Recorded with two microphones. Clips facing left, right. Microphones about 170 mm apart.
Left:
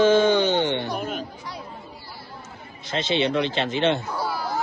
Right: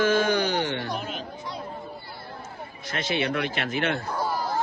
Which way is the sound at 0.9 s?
50° left (ahead or behind).